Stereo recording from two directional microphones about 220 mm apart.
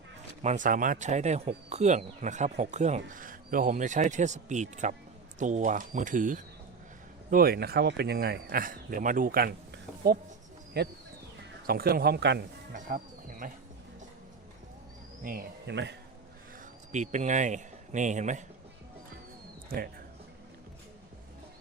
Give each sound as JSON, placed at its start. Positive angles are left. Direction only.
{"t": 0.4, "sound": "speech", "side_deg": -35}
{"t": 12.7, "sound": "a sound", "side_deg": -40}
{"t": 15.2, "sound": "speech", "side_deg": -40}
{"t": 16.9, "sound": "speech", "side_deg": -35}